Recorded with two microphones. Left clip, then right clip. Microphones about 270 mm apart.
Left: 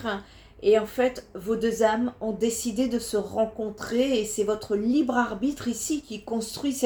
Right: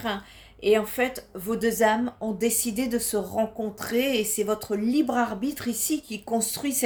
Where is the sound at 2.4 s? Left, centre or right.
Right.